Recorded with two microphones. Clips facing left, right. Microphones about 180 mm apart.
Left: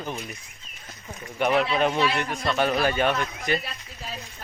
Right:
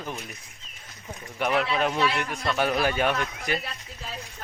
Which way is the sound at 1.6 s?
5° right (ahead or behind).